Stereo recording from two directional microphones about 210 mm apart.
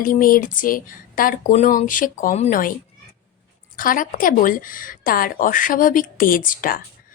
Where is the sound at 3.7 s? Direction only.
40° left (ahead or behind).